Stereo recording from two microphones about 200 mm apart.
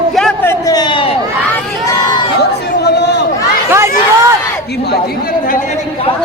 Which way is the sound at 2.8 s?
55° left (ahead or behind).